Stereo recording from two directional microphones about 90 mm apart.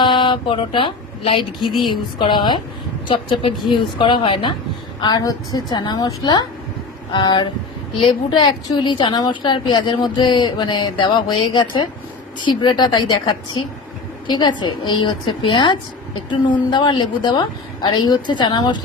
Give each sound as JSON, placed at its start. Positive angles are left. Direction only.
{"t": 0.0, "sound": "speech", "side_deg": 65}
{"t": 1.8, "sound": "a woman's voice", "side_deg": 60}
{"t": 4.9, "sound": "a woman's voice", "side_deg": 55}